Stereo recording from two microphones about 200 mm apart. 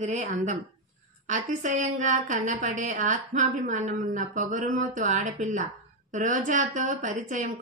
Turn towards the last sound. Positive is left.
turn(degrees=-40)  # may be behind; listen again after turning